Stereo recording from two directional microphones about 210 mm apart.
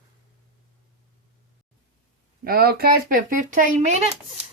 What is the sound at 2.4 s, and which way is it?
Speech, 45° right (ahead or behind).